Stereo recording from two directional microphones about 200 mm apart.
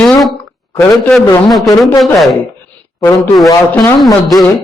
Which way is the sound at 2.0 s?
Centre (ahead or behind).